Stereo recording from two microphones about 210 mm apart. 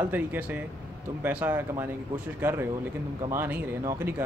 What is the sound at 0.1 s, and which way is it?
Speech, 10° right (ahead or behind).